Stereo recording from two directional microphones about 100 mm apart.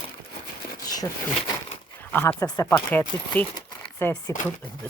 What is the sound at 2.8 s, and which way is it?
Speech, 20° left (ahead or behind).